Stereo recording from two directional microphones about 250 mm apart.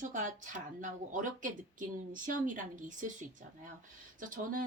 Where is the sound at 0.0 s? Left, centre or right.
Right.